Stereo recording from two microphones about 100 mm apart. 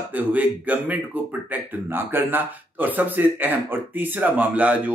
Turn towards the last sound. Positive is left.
turn(degrees=-15)  # may be behind; listen again after turning